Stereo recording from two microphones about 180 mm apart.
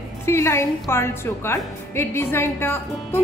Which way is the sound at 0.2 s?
15° left (ahead or behind).